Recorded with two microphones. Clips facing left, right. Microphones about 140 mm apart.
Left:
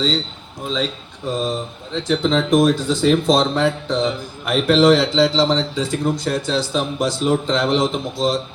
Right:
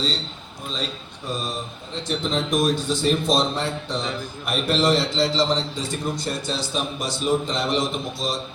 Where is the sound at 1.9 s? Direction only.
90° left.